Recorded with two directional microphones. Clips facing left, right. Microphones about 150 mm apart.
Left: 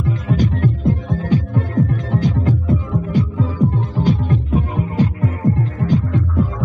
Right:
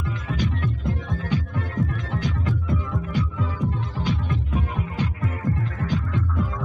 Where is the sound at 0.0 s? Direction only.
40° left (ahead or behind).